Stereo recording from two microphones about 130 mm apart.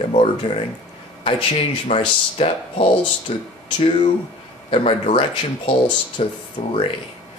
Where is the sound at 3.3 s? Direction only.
55° left (ahead or behind).